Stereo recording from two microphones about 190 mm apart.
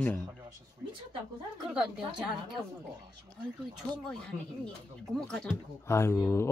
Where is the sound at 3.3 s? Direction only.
5° left (ahead or behind).